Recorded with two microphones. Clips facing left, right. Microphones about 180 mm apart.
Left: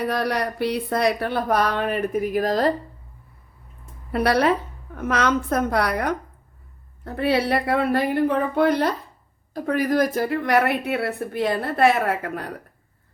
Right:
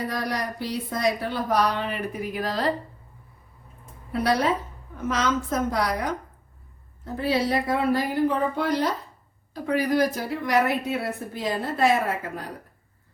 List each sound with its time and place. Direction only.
0.0 s speech: 65° left (ahead or behind); by 2.7 s 45° left (ahead or behind)
4.1 s speech: 65° left (ahead or behind)